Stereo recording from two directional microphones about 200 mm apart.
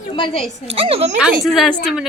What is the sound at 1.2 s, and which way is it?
Speech, 5° right (ahead or behind).